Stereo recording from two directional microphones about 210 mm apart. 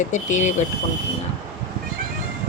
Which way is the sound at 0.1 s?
35° left (ahead or behind).